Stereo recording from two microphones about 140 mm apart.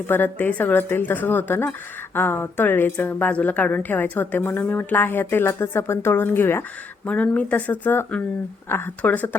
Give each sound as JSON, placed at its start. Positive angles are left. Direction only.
{"t": 0.1, "sound": "a woman's voice", "side_deg": 15}